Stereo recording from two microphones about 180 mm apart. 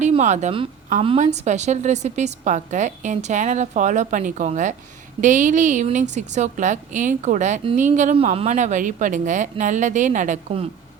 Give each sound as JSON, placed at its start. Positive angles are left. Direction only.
{"t": 0.0, "sound": "a woman's voice", "side_deg": -40}